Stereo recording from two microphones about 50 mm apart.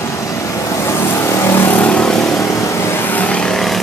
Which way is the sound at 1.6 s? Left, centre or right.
Left.